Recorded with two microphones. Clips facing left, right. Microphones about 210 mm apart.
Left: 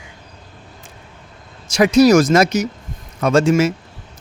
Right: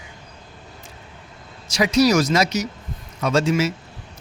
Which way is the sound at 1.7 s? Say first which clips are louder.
Left 6 dB; 50° left (ahead or behind).